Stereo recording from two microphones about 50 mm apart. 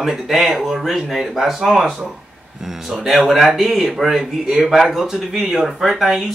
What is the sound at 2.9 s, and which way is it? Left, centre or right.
Speech, centre.